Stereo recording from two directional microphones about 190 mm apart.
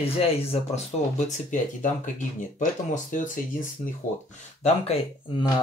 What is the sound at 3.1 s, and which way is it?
Speech, 45° left (ahead or behind).